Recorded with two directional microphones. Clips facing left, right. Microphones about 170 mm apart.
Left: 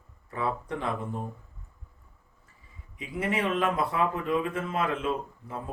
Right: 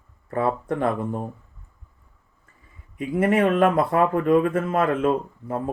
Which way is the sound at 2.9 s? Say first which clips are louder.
Right 10 dB; 50° right (ahead or behind).